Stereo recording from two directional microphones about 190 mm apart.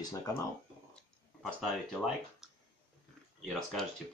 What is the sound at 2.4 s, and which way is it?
Clicking, centre (ahead or behind).